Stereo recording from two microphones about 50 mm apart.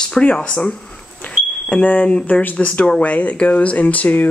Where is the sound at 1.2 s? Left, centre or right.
Left.